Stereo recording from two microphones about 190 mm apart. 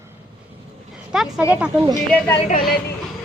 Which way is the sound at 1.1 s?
Centre (ahead or behind).